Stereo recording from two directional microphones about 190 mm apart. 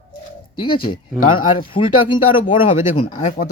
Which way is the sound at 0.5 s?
25° left (ahead or behind).